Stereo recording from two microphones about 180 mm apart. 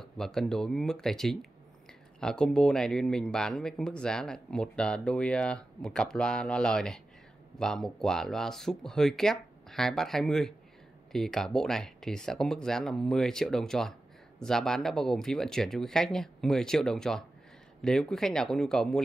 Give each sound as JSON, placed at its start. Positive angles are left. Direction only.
{"t": 0.0, "sound": "speech", "side_deg": 0}